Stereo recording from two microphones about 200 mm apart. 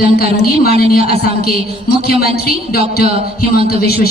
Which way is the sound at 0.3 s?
50° left (ahead or behind).